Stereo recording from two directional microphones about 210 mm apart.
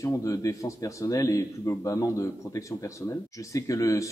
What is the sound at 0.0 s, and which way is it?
Speech, 15° left (ahead or behind).